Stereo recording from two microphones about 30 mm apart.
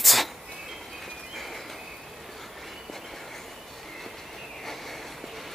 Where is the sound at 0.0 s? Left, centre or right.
Centre.